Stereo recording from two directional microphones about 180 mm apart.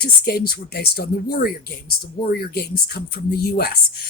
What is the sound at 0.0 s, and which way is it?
Speech, 55° left (ahead or behind).